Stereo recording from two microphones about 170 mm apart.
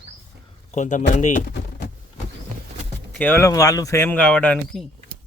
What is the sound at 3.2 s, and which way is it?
Speech, 15° left (ahead or behind).